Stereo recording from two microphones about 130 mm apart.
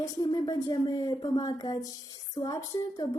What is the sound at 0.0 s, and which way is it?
A woman's voice, 30° left (ahead or behind).